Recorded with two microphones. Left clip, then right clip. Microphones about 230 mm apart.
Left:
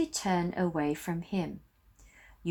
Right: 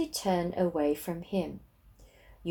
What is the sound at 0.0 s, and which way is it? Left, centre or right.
Speech, left.